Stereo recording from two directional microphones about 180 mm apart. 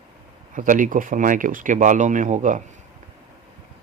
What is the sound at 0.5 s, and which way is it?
Speech, 45° right (ahead or behind).